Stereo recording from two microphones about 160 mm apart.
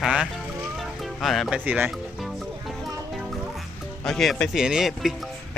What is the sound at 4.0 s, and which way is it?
Speech, centre (ahead or behind).